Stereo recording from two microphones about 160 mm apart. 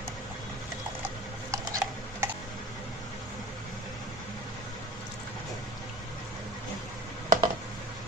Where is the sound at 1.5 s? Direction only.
20° right (ahead or behind).